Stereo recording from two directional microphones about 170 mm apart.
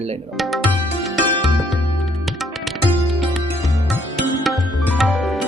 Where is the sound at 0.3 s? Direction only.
Centre (ahead or behind).